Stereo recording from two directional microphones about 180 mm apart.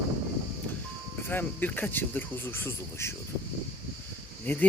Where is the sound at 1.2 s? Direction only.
10° left (ahead or behind).